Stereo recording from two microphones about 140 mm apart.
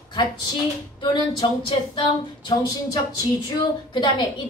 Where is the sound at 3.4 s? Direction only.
30° left (ahead or behind).